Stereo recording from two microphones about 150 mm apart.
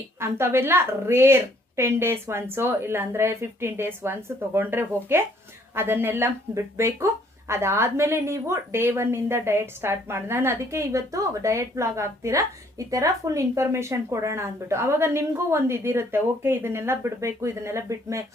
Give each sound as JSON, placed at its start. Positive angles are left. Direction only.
{"t": 0.2, "sound": "speech", "side_deg": -15}